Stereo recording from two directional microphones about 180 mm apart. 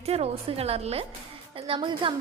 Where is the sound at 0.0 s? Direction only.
35° right (ahead or behind).